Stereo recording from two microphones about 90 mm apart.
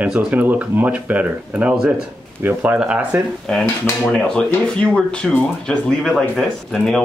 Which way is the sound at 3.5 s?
10° left (ahead or behind).